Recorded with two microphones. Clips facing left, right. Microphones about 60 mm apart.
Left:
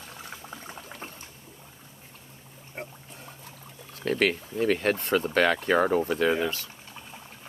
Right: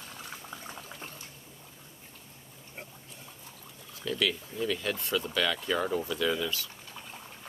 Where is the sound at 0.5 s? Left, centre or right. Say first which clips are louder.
Left 1 dB; left.